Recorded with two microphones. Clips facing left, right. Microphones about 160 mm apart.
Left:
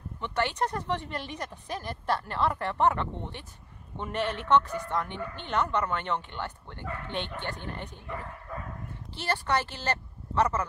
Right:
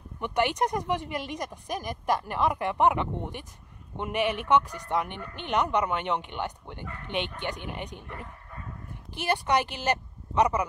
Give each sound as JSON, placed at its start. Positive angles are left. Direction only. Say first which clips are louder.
{"t": 0.2, "sound": "speech", "louder": "right 3 dB", "side_deg": -15}
{"t": 8.1, "sound": "bow-wow", "louder": "left 4 dB", "side_deg": 90}
{"t": 9.1, "sound": "a woman's voice", "louder": "right 3 dB", "side_deg": -15}